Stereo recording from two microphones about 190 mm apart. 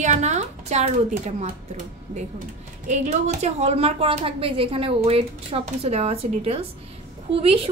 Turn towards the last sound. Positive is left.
turn(degrees=-30)  # may be behind; listen again after turning